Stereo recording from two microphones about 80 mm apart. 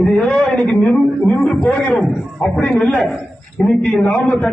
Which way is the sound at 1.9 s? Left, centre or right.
Centre.